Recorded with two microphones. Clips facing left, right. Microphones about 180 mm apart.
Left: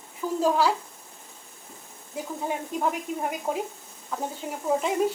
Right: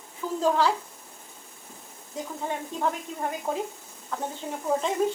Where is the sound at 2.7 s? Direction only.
10° left (ahead or behind).